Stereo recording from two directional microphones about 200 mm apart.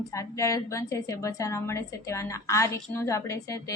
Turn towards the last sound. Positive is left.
turn(degrees=15)  # may be behind; listen again after turning